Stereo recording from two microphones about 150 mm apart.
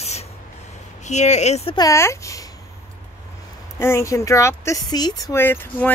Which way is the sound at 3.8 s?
20° left (ahead or behind).